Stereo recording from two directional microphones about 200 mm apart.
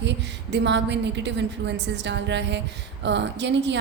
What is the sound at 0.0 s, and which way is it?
A woman's voice, 60° right (ahead or behind).